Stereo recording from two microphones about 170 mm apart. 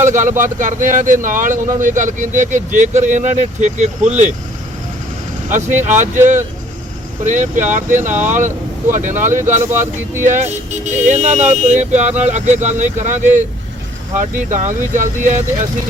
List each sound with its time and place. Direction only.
0.0 s speech: 45° right (ahead or behind)
5.5 s speech: 45° right (ahead or behind)
7.3 s speech: 45° right (ahead or behind)